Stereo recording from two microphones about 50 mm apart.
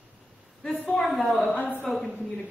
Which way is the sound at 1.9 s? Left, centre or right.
Centre.